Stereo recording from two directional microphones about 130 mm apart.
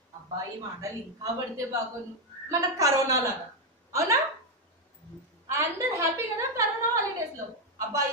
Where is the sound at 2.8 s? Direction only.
25° right (ahead or behind).